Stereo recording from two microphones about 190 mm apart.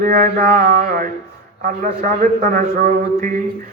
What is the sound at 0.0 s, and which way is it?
A man's voice, 50° right (ahead or behind).